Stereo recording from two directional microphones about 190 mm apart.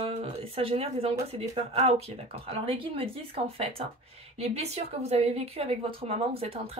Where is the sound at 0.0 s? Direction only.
30° right (ahead or behind).